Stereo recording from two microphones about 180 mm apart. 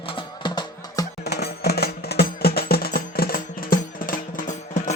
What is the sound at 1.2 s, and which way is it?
Music, 65° left (ahead or behind).